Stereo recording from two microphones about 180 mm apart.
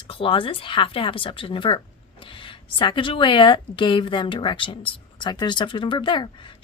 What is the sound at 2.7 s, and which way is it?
A woman's voice, 25° left (ahead or behind).